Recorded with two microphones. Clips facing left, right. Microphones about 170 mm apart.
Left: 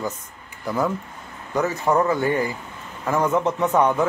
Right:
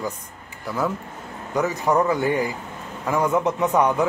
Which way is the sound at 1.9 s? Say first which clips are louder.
Even; 5° left (ahead or behind).